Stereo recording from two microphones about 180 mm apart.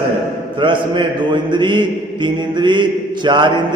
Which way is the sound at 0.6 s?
25° right (ahead or behind).